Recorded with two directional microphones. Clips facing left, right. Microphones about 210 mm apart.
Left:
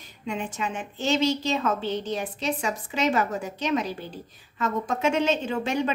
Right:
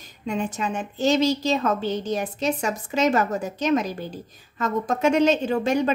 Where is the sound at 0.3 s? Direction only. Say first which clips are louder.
Right 4 dB; 40° right (ahead or behind).